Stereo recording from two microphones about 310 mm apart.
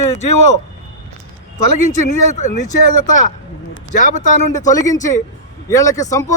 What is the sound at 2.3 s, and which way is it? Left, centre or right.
Speech, left.